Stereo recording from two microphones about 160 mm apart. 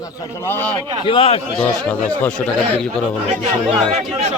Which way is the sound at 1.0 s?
35° left (ahead or behind).